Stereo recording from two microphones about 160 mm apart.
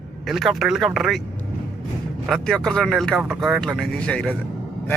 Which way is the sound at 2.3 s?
5° left (ahead or behind).